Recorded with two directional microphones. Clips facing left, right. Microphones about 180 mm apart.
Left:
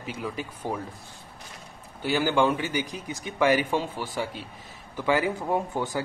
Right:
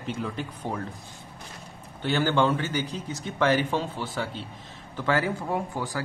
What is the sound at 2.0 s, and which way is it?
A man's voice, 10° left (ahead or behind).